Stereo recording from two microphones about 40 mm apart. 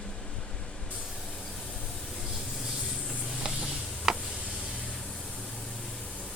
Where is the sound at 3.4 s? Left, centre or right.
Right.